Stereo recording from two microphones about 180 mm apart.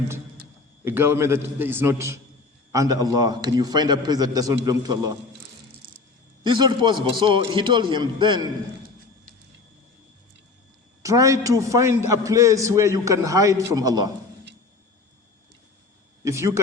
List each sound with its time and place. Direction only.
0.9 s a man's voice: 15° right (ahead or behind)
6.4 s a man's voice: 25° right (ahead or behind)
11.0 s a man's voice: 20° right (ahead or behind)
16.2 s a man's voice: 15° right (ahead or behind)